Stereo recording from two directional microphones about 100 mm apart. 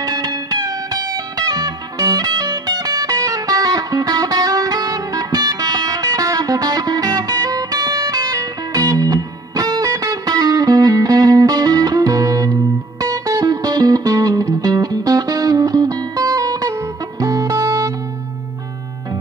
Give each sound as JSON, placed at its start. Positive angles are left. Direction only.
{"t": 0.0, "sound": "music", "side_deg": -40}